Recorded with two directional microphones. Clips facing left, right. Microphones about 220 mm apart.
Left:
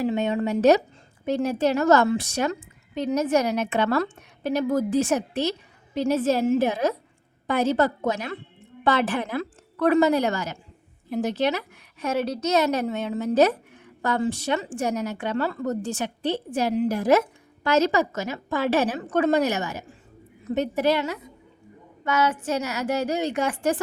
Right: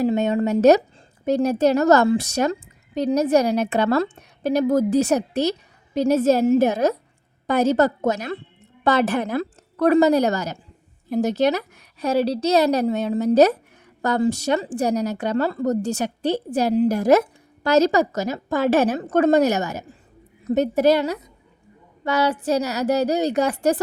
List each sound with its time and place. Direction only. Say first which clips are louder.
0.0 s a woman's voice: right 4 dB; 40° right (ahead or behind)